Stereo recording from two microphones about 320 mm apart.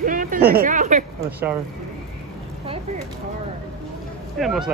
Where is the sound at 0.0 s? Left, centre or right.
Right.